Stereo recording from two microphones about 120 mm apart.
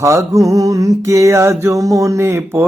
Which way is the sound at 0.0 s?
25° right (ahead or behind).